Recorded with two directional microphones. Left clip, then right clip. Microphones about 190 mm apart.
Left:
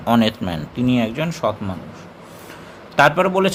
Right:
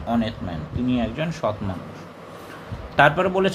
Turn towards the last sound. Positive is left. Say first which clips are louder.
# left 3 dB
turn(degrees=20)  # may be behind; listen again after turning